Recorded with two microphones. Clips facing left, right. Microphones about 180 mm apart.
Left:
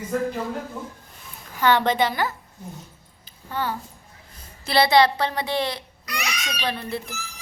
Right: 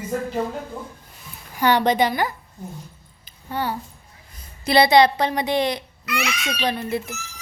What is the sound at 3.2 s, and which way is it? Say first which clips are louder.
Babbling: right 2 dB; 15° right (ahead or behind).